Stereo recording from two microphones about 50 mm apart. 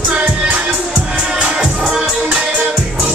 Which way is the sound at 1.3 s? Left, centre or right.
Right.